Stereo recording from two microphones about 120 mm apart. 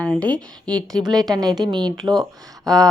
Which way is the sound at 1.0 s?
35° right (ahead or behind).